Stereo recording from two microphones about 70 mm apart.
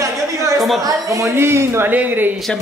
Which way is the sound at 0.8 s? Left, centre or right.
Right.